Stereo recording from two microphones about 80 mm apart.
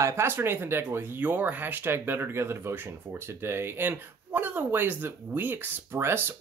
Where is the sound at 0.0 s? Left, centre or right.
Right.